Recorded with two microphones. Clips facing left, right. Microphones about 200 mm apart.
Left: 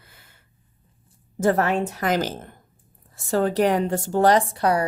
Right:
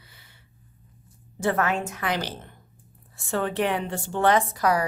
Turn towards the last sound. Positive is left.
turn(degrees=30)  # may be behind; listen again after turning